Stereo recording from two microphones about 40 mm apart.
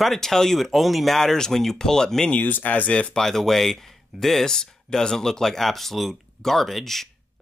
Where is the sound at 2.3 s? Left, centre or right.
Left.